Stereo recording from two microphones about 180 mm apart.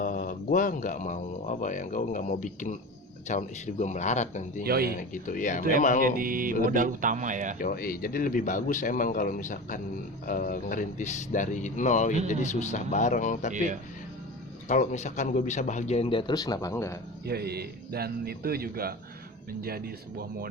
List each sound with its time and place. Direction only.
0.0 s a man's voice: 50° left (ahead or behind)
4.6 s a man's voice: 60° right (ahead or behind)
4.9 s speech: 45° left (ahead or behind)
6.0 s a man's voice: 50° right (ahead or behind)
7.6 s a man's voice: 55° left (ahead or behind)
14.7 s a man's voice: 40° left (ahead or behind); by 17.0 s 15° left (ahead or behind)
17.2 s a man's voice: 60° right (ahead or behind)